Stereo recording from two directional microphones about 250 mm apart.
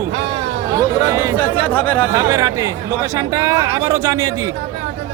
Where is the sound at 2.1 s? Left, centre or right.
Centre.